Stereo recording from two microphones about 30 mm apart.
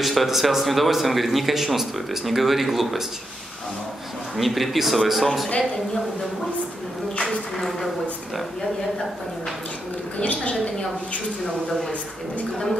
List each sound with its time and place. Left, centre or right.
0.0 s speech: centre
4.4 s speech: centre
7.2 s speech: centre
10.2 s a woman's voice: left